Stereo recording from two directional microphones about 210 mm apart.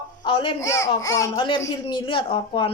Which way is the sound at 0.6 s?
15° left (ahead or behind).